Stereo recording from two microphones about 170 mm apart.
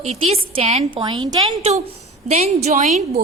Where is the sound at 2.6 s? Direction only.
40° right (ahead or behind).